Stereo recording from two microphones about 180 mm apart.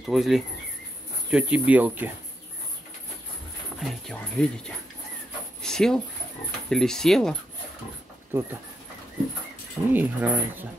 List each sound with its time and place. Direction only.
0.0 s speech: centre (ahead or behind)
3.8 s speech: 5° left (ahead or behind)
5.6 s a sound: 5° left (ahead or behind)
6.7 s speech: centre (ahead or behind)
8.3 s speech: 10° right (ahead or behind)
9.9 s speech: 10° right (ahead or behind)